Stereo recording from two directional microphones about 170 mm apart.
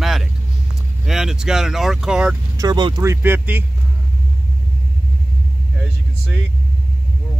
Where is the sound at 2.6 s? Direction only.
25° right (ahead or behind).